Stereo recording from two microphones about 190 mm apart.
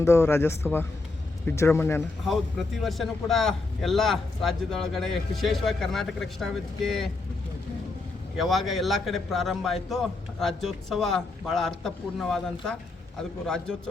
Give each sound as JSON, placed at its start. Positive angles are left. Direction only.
{"t": 0.0, "sound": "speech", "side_deg": 15}
{"t": 2.2, "sound": "a man's voice", "side_deg": 0}
{"t": 8.4, "sound": "a man's voice", "side_deg": 0}